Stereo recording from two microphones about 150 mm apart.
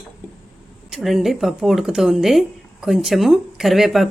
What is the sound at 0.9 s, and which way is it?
Speech, centre (ahead or behind).